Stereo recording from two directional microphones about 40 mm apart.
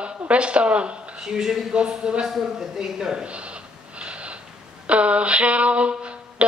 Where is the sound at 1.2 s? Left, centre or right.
Centre.